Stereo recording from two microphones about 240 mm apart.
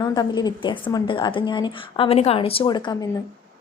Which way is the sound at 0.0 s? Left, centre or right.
Centre.